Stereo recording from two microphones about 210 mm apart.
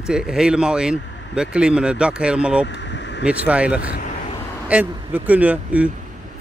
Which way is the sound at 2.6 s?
55° left (ahead or behind).